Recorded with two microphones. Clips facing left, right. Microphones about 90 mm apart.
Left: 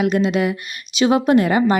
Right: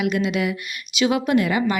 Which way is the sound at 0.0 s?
35° left (ahead or behind).